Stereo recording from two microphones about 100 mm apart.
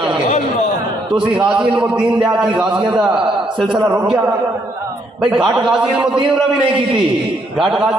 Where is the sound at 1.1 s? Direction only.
5° right (ahead or behind).